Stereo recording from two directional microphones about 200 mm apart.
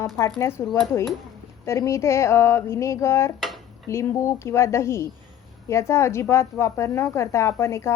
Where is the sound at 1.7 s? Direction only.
15° left (ahead or behind).